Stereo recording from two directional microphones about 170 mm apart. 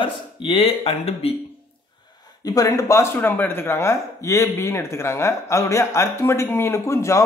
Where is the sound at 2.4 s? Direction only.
20° left (ahead or behind).